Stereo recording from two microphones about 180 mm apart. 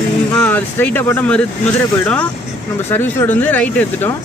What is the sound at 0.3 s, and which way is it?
Speech, 10° left (ahead or behind).